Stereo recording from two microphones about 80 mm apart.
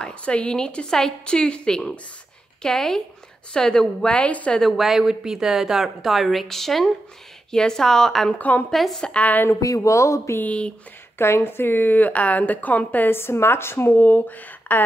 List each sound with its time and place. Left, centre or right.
0.0 s a woman's voice: centre
4.6 s a woman's voice: centre
8.4 s a woman's voice: centre
8.6 s speech: centre
9.1 s a woman's voice: left
9.6 s speech: left
10.4 s a woman's voice: centre
11.1 s a woman's voice: left